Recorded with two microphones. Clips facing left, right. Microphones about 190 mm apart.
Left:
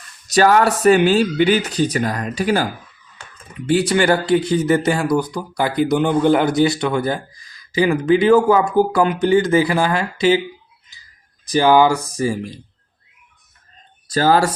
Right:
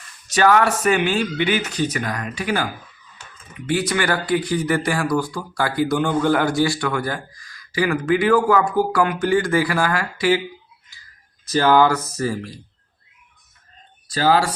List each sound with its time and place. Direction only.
0.3 s speech: 35° left (ahead or behind)
3.7 s speech: 30° left (ahead or behind)
11.4 s speech: 15° left (ahead or behind)
14.1 s speech: 45° left (ahead or behind)